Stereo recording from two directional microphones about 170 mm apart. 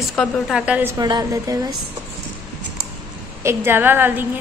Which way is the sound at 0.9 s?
25° right (ahead or behind).